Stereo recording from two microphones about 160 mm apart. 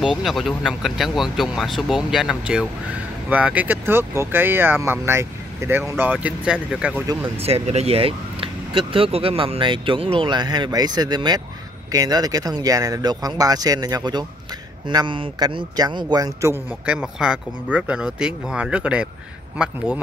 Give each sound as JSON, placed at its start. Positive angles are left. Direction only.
{"t": 0.0, "sound": "speech", "side_deg": -5}
{"t": 7.4, "sound": "speech", "side_deg": -40}
{"t": 16.8, "sound": "speech", "side_deg": -5}